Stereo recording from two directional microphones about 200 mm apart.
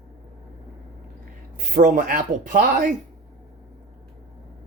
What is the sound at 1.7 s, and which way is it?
Speech, 40° right (ahead or behind).